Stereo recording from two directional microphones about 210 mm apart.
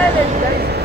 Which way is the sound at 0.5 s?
50° right (ahead or behind).